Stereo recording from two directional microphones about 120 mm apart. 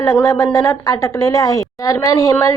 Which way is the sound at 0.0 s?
25° left (ahead or behind).